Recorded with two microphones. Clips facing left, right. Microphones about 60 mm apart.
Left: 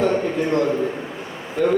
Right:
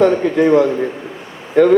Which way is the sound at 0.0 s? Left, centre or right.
Right.